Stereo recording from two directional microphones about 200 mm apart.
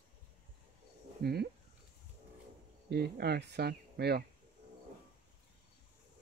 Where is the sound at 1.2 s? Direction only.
50° right (ahead or behind).